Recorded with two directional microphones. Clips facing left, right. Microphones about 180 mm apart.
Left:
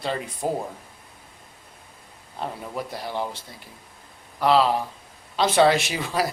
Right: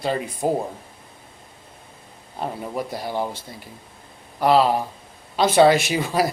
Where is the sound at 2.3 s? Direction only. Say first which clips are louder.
Right 3 dB; 20° right (ahead or behind).